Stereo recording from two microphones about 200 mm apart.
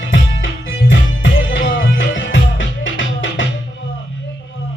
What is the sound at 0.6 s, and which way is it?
Music, 65° left (ahead or behind).